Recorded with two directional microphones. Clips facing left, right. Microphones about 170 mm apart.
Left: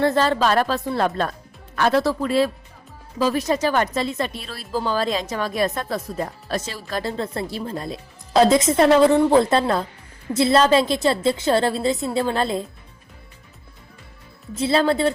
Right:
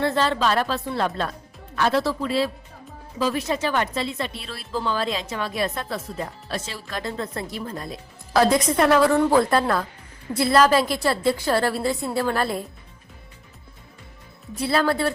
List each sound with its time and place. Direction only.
0.0 s a woman's voice: 45° left (ahead or behind); by 12.6 s 20° left (ahead or behind)
14.5 s a woman's voice: 25° left (ahead or behind)